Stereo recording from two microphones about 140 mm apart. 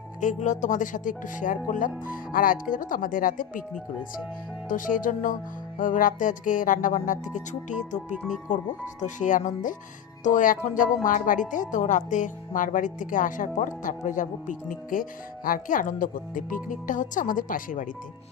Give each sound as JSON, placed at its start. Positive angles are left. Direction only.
{"t": 0.2, "sound": "speech", "side_deg": 65}
{"t": 4.7, "sound": "speech", "side_deg": 75}